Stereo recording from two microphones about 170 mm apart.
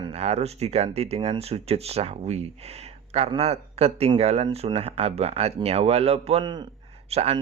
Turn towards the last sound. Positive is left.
turn(degrees=-35)  # may be behind; listen again after turning